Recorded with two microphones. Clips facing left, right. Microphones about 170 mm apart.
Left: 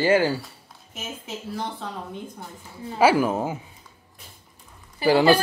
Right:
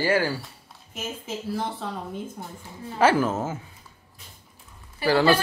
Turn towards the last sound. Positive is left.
turn(degrees=20)  # may be behind; listen again after turning